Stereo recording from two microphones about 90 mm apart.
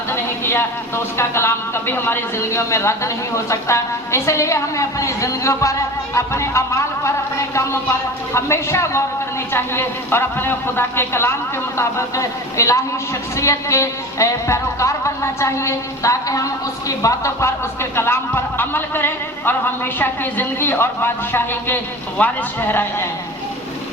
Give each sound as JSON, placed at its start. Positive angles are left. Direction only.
{"t": 0.1, "sound": "speech", "side_deg": 25}